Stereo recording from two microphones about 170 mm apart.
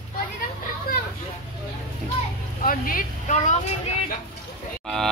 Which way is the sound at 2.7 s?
55° left (ahead or behind).